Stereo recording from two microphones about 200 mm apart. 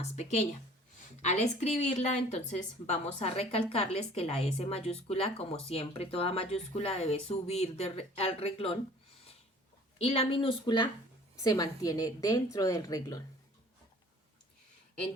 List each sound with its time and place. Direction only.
0.0 s a woman's voice: 35° left (ahead or behind)
10.0 s a woman's voice: 30° left (ahead or behind)